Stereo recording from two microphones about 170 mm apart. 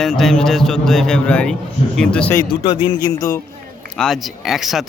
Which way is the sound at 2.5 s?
30° left (ahead or behind).